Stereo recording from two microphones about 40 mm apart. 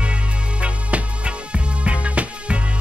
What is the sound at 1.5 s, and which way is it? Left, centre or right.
Music, right.